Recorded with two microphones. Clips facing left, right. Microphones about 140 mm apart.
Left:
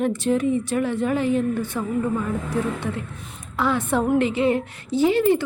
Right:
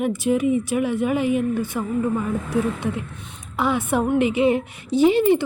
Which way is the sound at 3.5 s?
15° right (ahead or behind).